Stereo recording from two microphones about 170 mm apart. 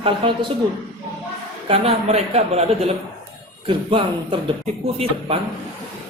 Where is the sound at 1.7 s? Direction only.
35° right (ahead or behind).